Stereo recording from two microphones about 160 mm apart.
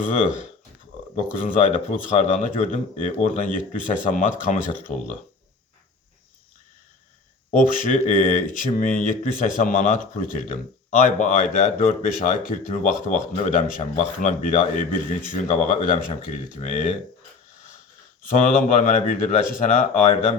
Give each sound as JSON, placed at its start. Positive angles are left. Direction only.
{"t": 1.4, "sound": "speech", "side_deg": 55}
{"t": 7.5, "sound": "speech", "side_deg": 55}
{"t": 18.3, "sound": "speech", "side_deg": 55}